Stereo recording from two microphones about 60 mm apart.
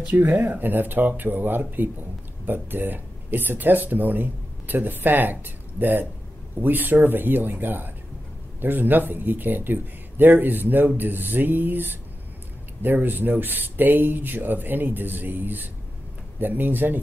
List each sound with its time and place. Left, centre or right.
0.1 s speech: right